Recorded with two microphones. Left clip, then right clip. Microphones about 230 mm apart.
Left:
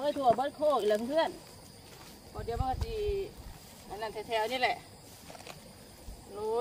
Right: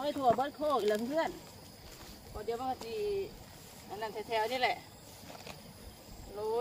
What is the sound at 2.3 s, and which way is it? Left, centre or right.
Speech, centre.